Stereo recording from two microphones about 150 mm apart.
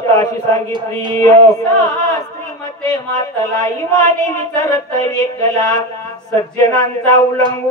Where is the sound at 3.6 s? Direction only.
20° left (ahead or behind).